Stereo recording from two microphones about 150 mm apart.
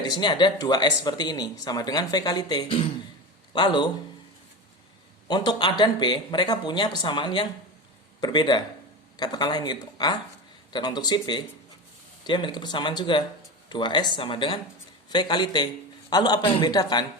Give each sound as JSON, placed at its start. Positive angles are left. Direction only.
{"t": 0.0, "sound": "speech", "side_deg": 30}
{"t": 5.3, "sound": "speech", "side_deg": 30}